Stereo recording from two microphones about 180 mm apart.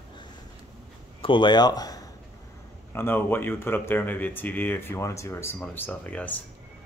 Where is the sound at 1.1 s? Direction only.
30° left (ahead or behind); by 6.3 s 10° left (ahead or behind).